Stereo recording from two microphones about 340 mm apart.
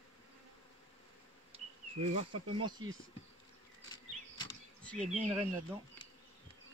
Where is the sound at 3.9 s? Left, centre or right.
Centre.